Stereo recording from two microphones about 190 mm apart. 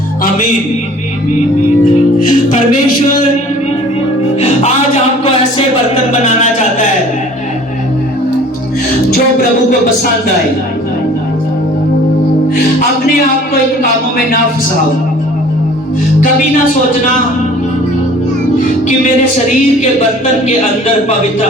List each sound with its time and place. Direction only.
1.8 s music: 45° left (ahead or behind)